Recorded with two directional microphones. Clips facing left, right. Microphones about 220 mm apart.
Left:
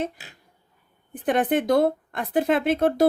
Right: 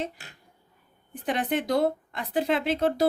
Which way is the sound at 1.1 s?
50° left (ahead or behind).